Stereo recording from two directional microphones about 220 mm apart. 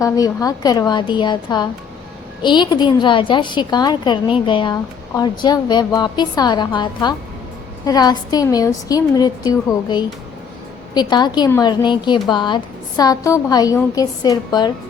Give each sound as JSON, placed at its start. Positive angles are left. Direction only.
{"t": 0.0, "sound": "a woman's voice", "side_deg": 15}